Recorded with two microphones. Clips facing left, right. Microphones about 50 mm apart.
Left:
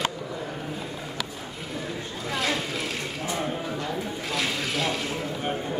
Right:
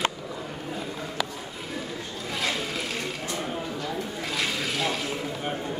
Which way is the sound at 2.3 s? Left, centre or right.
Centre.